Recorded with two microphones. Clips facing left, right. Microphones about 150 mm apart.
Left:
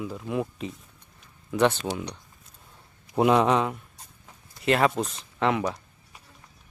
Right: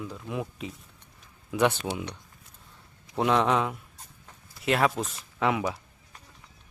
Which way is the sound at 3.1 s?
10° left (ahead or behind).